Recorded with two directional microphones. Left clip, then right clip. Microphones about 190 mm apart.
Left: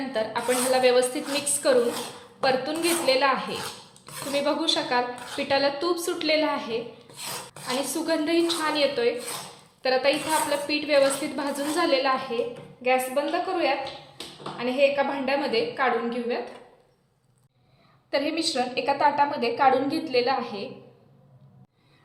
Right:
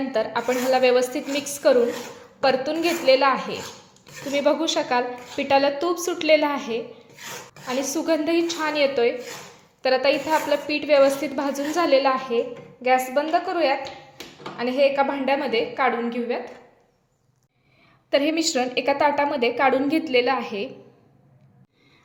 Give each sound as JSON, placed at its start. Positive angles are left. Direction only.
{"t": 0.1, "sound": "a woman's voice", "side_deg": -30}
{"t": 8.0, "sound": "a woman's voice", "side_deg": -30}
{"t": 18.1, "sound": "a woman's voice", "side_deg": -45}